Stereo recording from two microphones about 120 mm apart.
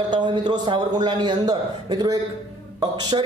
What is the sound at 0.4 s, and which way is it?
A man's voice, 40° right (ahead or behind).